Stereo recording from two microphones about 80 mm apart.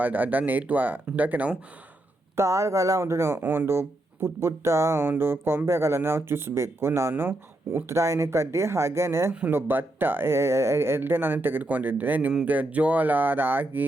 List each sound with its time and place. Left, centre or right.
0.0 s speech: right
2.3 s speech: right